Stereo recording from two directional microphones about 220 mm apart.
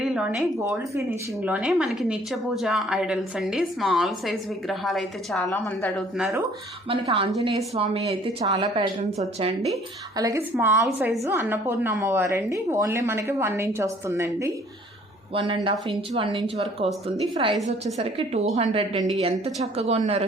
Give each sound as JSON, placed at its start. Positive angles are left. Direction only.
{"t": 0.0, "sound": "a woman's voice", "side_deg": -5}
{"t": 6.1, "sound": "a woman's voice", "side_deg": -5}
{"t": 6.8, "sound": "speech", "side_deg": -25}
{"t": 10.2, "sound": "a woman's voice", "side_deg": -15}
{"t": 15.3, "sound": "speech", "side_deg": -25}